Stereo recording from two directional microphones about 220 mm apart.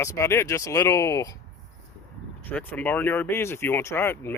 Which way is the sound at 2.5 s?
10° left (ahead or behind).